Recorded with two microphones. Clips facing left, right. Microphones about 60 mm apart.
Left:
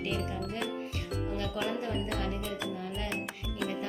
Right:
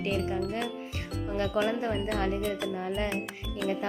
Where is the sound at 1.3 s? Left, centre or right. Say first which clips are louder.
Right 10 dB; right.